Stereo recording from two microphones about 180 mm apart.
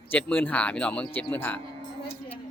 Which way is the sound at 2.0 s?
30° left (ahead or behind).